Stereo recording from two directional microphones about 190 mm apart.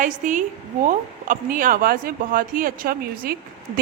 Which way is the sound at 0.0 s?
40° right (ahead or behind).